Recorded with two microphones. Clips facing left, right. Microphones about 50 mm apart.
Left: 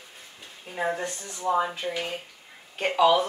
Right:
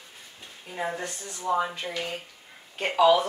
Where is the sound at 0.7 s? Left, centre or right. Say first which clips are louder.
Left 3 dB; centre.